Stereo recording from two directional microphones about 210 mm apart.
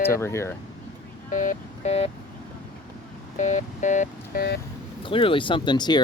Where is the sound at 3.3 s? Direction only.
35° left (ahead or behind).